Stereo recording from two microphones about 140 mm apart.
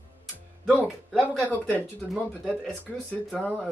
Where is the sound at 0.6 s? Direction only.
Centre (ahead or behind).